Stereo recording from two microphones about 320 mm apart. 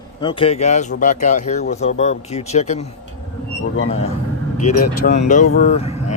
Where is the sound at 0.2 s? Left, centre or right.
Centre.